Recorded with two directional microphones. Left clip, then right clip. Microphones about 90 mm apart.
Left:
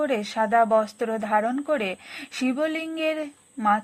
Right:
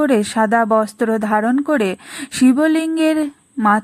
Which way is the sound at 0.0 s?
45° right (ahead or behind).